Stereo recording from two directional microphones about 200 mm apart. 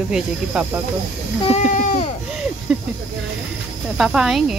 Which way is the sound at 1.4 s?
30° left (ahead or behind).